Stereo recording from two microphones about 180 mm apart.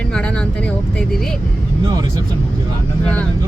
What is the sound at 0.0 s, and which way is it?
Speech, 5° left (ahead or behind).